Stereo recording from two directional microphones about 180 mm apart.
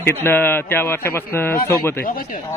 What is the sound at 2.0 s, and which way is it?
Speech, 55° left (ahead or behind).